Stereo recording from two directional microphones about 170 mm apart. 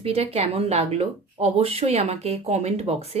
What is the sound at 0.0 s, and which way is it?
Speech, 35° right (ahead or behind).